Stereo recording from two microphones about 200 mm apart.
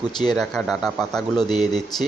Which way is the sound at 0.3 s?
Centre (ahead or behind).